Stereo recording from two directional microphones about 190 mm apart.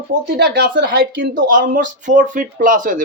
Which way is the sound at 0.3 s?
60° right (ahead or behind).